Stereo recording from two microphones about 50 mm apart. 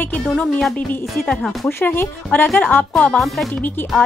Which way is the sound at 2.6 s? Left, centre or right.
Left.